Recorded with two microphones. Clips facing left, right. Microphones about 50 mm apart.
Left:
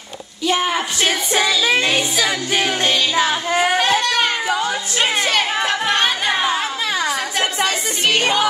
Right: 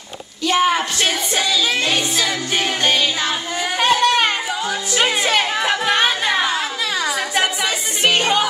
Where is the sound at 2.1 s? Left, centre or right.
Centre.